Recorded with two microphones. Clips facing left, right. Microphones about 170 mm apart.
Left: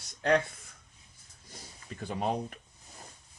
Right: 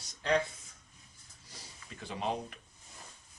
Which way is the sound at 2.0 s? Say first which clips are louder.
Left 4 dB; 50° left (ahead or behind).